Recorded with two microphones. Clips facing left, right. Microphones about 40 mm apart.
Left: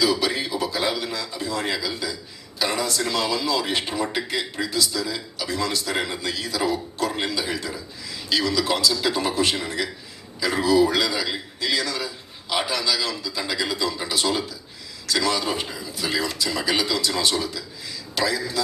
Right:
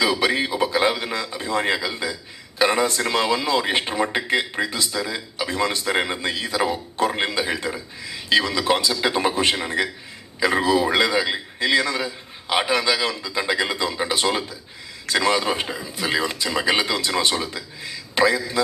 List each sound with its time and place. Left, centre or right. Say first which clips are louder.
0.0 s a man's voice: right 2 dB; right